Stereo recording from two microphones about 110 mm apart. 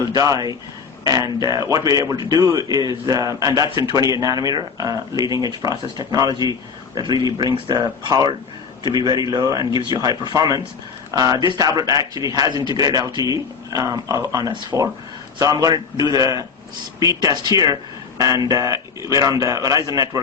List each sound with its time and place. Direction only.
0.1 s a man's voice: 35° right (ahead or behind)